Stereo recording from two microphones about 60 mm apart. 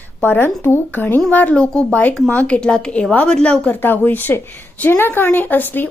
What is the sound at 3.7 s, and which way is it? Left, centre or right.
Speech, left.